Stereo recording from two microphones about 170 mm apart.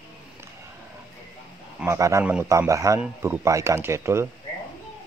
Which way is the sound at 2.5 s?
20° right (ahead or behind).